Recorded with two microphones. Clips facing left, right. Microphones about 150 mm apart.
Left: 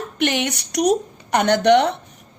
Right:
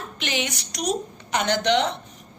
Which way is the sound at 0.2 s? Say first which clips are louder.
Left 7 dB; 60° left (ahead or behind).